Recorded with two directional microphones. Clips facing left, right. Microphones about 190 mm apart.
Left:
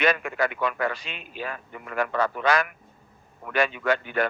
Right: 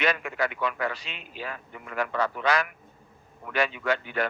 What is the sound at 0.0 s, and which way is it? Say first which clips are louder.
A man's voice: left 3 dB; 50° left (ahead or behind).